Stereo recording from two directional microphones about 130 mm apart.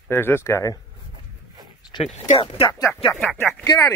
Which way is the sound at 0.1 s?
15° left (ahead or behind).